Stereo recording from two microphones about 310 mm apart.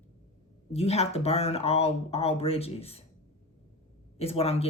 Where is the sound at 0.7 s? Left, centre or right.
Centre.